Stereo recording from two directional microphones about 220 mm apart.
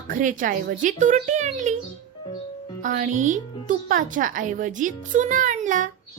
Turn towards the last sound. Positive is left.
turn(degrees=-35)  # may be behind; listen again after turning